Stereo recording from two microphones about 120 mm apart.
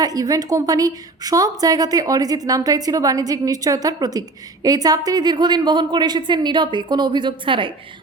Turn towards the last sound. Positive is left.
turn(degrees=-45)  # may be behind; listen again after turning